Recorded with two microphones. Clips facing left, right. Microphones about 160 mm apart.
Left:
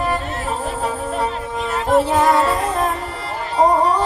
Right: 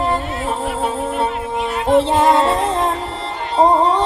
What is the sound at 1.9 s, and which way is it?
Music, 25° right (ahead or behind).